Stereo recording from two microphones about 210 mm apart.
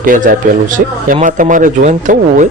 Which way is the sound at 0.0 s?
40° right (ahead or behind).